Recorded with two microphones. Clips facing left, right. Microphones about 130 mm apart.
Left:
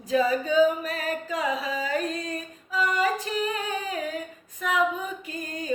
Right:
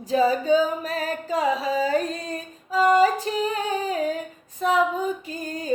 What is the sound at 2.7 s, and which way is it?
Female singing, 35° right (ahead or behind).